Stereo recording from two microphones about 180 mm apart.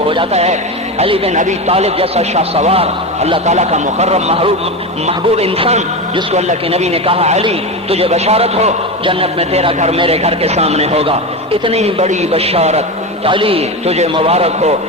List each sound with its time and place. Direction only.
0.1 s a man's voice: 35° right (ahead or behind)